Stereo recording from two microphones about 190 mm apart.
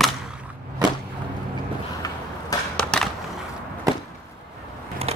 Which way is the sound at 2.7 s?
5° left (ahead or behind).